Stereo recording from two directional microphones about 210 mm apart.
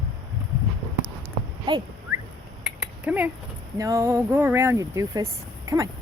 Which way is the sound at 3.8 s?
15° right (ahead or behind).